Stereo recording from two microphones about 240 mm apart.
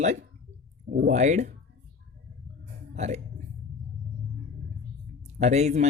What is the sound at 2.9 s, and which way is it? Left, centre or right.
Speech, right.